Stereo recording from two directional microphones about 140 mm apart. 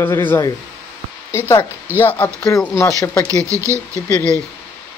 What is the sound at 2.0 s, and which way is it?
Speech, 15° left (ahead or behind).